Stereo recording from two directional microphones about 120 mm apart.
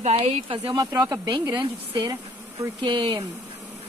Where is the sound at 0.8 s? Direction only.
30° right (ahead or behind).